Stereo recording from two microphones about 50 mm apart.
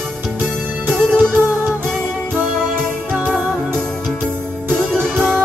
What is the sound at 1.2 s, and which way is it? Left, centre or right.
Music, right.